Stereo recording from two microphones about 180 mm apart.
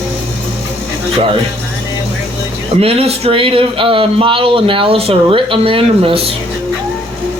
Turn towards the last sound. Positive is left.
turn(degrees=-30)  # may be behind; listen again after turning